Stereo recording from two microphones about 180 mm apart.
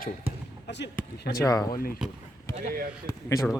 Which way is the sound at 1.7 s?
55° left (ahead or behind).